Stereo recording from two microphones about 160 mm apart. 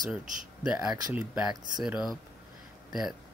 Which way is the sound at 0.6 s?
5° right (ahead or behind).